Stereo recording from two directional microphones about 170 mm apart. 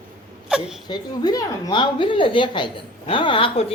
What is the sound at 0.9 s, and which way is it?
A woman's voice, 25° left (ahead or behind).